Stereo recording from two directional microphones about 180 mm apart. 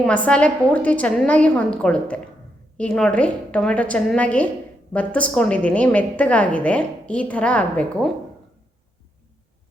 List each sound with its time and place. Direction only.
0.0 s a woman's voice: 5° left (ahead or behind)